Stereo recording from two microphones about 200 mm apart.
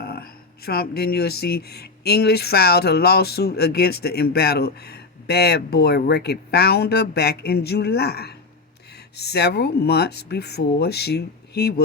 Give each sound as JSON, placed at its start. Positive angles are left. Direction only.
{"t": 0.0, "sound": "speech", "side_deg": 50}